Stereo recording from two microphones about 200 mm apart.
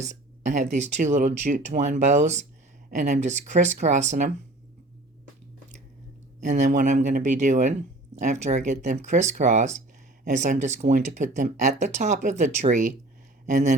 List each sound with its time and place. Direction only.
0.0 s speech: 35° right (ahead or behind)
6.4 s speech: 40° right (ahead or behind)